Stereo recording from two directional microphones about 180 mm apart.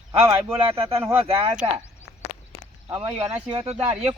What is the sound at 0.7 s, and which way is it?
Speech, 30° right (ahead or behind).